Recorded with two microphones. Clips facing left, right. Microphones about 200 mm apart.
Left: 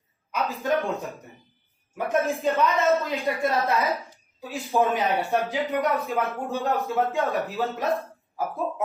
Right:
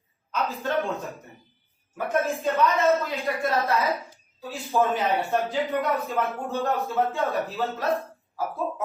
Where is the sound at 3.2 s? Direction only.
Centre (ahead or behind).